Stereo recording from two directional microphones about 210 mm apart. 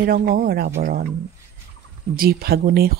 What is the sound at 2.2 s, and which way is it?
Speech, 45° right (ahead or behind).